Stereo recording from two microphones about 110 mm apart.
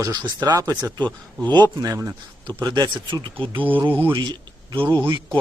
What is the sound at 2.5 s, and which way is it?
Speech, 40° right (ahead or behind).